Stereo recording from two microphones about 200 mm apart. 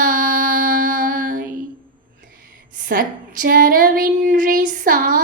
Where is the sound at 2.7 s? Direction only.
45° right (ahead or behind).